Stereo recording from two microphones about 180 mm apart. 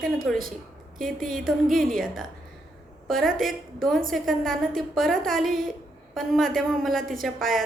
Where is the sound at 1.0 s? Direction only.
Centre (ahead or behind).